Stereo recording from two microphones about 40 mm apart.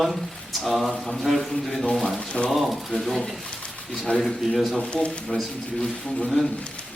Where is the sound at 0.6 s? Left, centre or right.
Centre.